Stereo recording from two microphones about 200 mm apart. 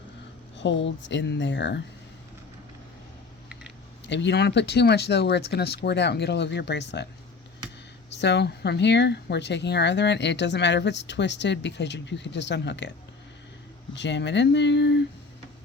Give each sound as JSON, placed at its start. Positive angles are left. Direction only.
{"t": 0.5, "sound": "speech", "side_deg": 65}
{"t": 4.0, "sound": "speech", "side_deg": 60}
{"t": 8.2, "sound": "speech", "side_deg": 55}
{"t": 13.9, "sound": "speech", "side_deg": 60}